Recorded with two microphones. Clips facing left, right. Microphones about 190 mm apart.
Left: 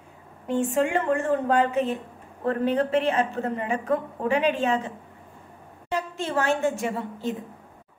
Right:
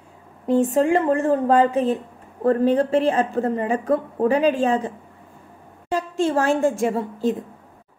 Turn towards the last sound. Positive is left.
turn(degrees=-35)  # may be behind; listen again after turning